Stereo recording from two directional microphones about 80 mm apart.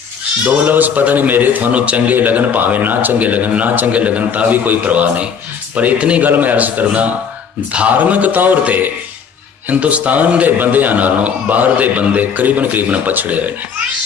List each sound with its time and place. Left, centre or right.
0.4 s a man's voice: right